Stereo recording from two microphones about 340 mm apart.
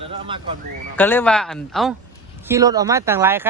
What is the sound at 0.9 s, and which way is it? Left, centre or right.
Speech, centre.